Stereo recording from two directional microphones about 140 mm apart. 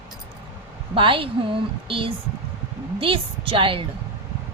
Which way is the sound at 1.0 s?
40° right (ahead or behind).